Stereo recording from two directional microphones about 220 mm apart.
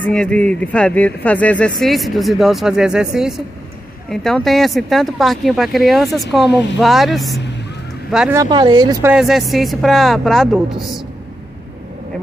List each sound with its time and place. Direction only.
0.0 s speech: 5° left (ahead or behind)
8.4 s speech: 20° right (ahead or behind)
9.1 s speech: centre (ahead or behind)